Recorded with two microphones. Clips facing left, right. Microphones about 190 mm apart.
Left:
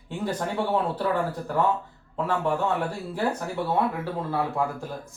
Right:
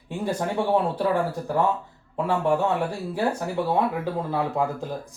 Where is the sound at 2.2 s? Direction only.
15° right (ahead or behind).